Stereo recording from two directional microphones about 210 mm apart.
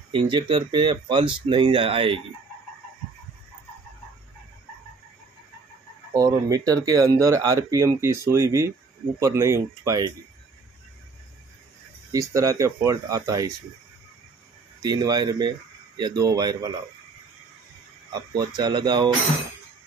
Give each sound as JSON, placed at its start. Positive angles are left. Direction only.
{"t": 0.1, "sound": "speech", "side_deg": -25}
{"t": 6.1, "sound": "speech", "side_deg": -15}
{"t": 12.1, "sound": "speech", "side_deg": -15}
{"t": 14.8, "sound": "speech", "side_deg": -20}
{"t": 18.1, "sound": "speech", "side_deg": -20}